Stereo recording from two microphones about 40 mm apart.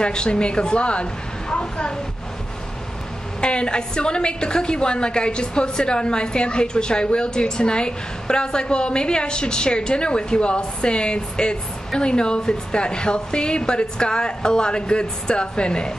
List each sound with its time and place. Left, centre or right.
0.0 s a woman's voice: left
3.3 s a woman's voice: left